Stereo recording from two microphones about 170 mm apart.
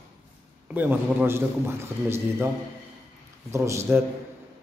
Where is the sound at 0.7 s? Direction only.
10° right (ahead or behind).